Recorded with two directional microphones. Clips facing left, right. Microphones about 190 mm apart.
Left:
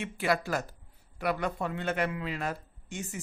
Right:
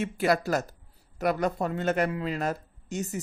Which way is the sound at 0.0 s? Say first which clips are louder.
Right 4 dB; 40° right (ahead or behind).